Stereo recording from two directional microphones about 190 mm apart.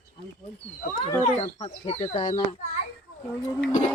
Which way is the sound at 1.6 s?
35° left (ahead or behind).